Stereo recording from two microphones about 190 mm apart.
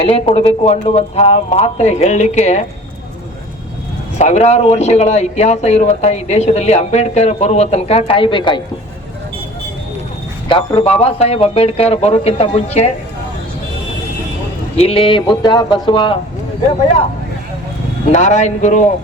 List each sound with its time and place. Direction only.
0.0 s speech: 30° left (ahead or behind)
4.2 s speech: 35° left (ahead or behind)
10.5 s speech: 25° left (ahead or behind)
14.8 s speech: 30° left (ahead or behind)
18.1 s speech: 40° left (ahead or behind)